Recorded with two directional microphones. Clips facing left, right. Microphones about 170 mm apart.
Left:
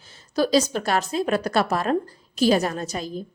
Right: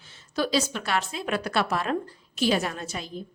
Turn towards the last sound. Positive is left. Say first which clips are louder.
# left 6 dB
turn(degrees=40)  # may be behind; listen again after turning